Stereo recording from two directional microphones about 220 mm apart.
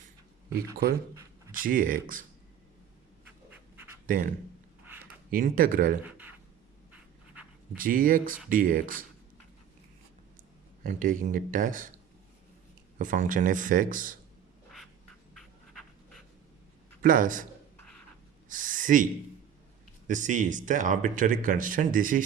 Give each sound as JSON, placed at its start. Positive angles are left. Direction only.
{"t": 0.5, "sound": "speech", "side_deg": -15}
{"t": 1.5, "sound": "speech", "side_deg": -40}
{"t": 4.0, "sound": "speech", "side_deg": -40}
{"t": 5.3, "sound": "speech", "side_deg": -40}
{"t": 6.0, "sound": "a sound", "side_deg": -5}
{"t": 6.9, "sound": "writing", "side_deg": -5}
{"t": 7.8, "sound": "speech", "side_deg": -40}
{"t": 10.8, "sound": "speech", "side_deg": -35}
{"t": 13.0, "sound": "speech", "side_deg": -35}
{"t": 15.4, "sound": "writing", "side_deg": 0}
{"t": 17.0, "sound": "a man's voice", "side_deg": -40}
{"t": 18.4, "sound": "a sound", "side_deg": -35}
{"t": 20.1, "sound": "speech", "side_deg": -35}